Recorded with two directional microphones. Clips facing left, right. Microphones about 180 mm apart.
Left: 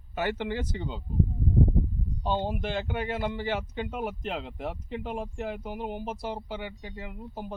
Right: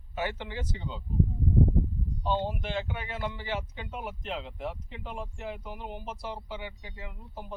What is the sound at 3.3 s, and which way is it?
A man's voice, 50° left (ahead or behind).